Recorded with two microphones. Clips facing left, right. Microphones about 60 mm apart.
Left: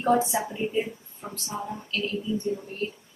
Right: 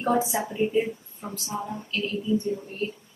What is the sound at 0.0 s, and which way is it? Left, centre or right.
Speech, centre.